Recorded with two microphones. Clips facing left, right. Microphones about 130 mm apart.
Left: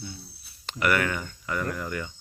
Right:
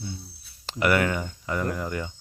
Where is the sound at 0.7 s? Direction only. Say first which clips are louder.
Right 3 dB; 25° right (ahead or behind).